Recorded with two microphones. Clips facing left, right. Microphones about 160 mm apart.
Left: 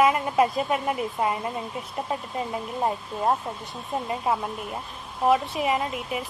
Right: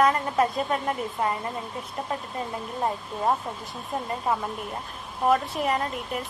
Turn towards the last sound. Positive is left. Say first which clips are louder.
# left 1 dB
turn(degrees=5)  # may be behind; listen again after turning